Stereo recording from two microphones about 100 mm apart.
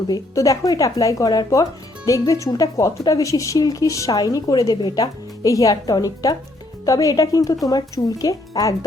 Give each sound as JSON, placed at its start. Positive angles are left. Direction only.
{"t": 0.1, "sound": "speech", "side_deg": 35}